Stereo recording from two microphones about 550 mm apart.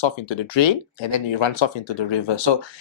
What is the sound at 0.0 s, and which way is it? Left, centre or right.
Speech, left.